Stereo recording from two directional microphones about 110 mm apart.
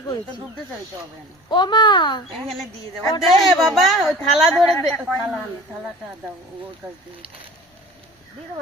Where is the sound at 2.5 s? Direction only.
Centre (ahead or behind).